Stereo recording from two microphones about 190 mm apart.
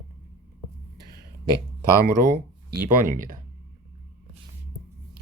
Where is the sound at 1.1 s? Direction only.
20° left (ahead or behind).